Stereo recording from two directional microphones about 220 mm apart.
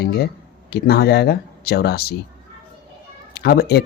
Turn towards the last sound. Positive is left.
turn(degrees=45)  # may be behind; listen again after turning